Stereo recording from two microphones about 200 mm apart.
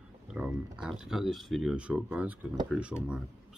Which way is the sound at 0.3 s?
5° right (ahead or behind).